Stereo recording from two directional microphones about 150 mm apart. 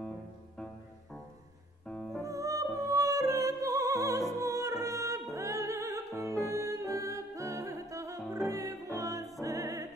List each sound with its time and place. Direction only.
1.9 s music: 5° left (ahead or behind)
2.2 s music: 20° right (ahead or behind)